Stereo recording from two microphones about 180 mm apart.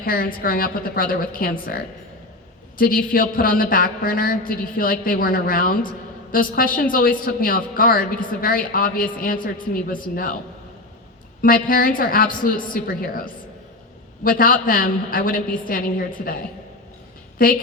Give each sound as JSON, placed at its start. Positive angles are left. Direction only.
{"t": 0.0, "sound": "a man's voice", "side_deg": 50}
{"t": 11.4, "sound": "a man's voice", "side_deg": 50}